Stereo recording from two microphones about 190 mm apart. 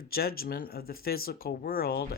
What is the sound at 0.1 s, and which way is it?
Speech, 55° left (ahead or behind).